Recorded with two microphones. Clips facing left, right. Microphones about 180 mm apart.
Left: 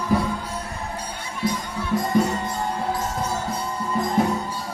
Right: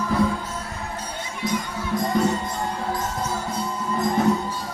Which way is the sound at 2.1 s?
10° left (ahead or behind).